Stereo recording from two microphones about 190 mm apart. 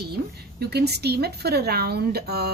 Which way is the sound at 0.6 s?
55° right (ahead or behind).